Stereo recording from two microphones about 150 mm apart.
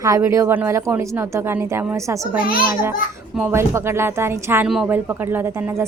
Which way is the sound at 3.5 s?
15° right (ahead or behind).